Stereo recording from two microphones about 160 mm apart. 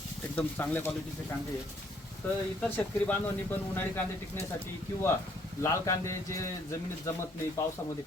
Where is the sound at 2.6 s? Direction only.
10° left (ahead or behind).